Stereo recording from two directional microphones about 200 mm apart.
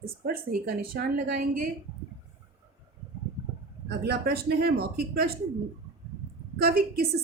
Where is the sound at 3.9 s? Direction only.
55° right (ahead or behind).